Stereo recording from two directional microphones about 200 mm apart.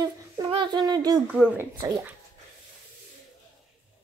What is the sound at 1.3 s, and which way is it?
Speech, 5° right (ahead or behind).